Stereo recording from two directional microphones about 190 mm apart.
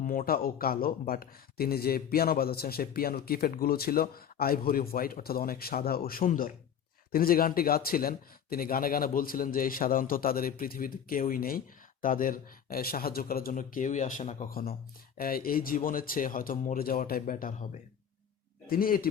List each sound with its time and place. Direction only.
0.0 s speech: 45° left (ahead or behind)
18.7 s speech: 50° left (ahead or behind)